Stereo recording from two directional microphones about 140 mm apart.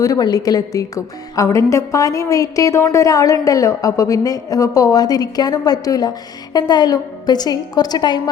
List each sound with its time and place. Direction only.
0.0 s a woman's voice: 25° left (ahead or behind)